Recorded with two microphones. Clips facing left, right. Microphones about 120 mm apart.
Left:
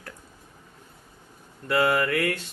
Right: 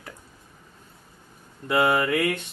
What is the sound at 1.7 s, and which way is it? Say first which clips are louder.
Speech: right 1 dB; 20° right (ahead or behind).